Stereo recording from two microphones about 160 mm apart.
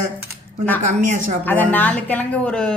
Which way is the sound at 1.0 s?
50° right (ahead or behind).